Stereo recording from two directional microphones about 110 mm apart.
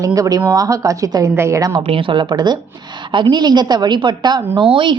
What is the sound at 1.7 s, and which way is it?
A woman's voice, 50° right (ahead or behind).